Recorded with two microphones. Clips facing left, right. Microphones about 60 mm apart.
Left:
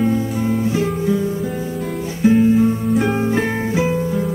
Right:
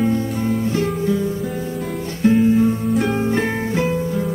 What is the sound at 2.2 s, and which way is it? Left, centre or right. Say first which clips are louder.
Music: left 1 dB; centre.